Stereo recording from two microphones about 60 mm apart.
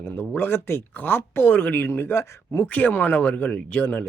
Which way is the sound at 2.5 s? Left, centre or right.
Left.